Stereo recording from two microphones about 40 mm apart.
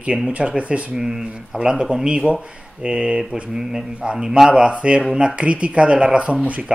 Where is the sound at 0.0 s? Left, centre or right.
Right.